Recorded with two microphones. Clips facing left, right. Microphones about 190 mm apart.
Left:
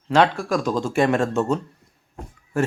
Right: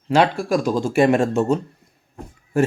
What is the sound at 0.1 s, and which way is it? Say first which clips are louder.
Speech: right 1 dB; 10° right (ahead or behind).